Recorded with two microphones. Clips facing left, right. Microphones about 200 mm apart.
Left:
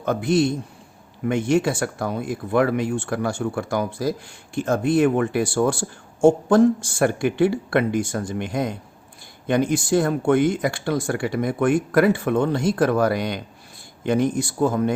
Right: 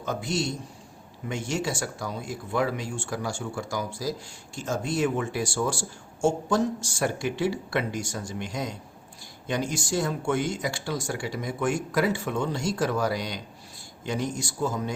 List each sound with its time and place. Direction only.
0.0 s speech: 60° left (ahead or behind)